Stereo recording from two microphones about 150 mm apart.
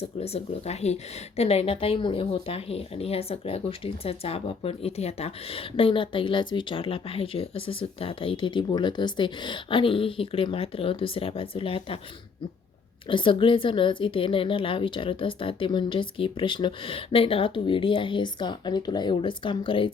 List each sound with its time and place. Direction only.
0.2 s speech: 45° left (ahead or behind)
13.1 s speech: 35° left (ahead or behind)